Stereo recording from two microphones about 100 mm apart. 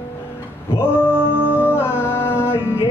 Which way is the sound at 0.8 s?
20° left (ahead or behind).